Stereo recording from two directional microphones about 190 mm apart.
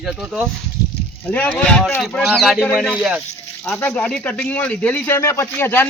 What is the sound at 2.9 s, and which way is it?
Speech, 5° right (ahead or behind).